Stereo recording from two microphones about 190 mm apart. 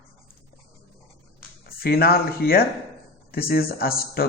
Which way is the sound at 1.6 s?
55° left (ahead or behind).